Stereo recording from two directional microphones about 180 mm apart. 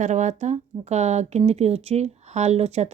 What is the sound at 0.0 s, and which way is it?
Speech, 40° right (ahead or behind).